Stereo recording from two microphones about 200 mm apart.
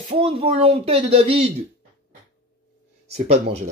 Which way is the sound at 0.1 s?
30° right (ahead or behind).